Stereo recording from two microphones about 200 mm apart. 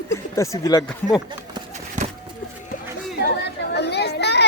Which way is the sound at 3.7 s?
55° left (ahead or behind).